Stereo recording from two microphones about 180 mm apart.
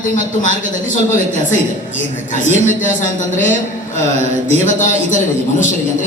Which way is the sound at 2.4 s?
45° left (ahead or behind).